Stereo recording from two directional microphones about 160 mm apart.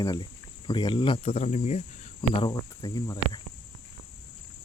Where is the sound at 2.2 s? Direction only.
30° left (ahead or behind).